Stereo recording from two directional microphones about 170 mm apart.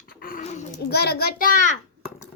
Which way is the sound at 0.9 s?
70° left (ahead or behind).